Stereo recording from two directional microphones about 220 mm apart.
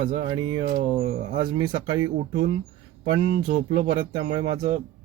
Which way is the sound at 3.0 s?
25° right (ahead or behind).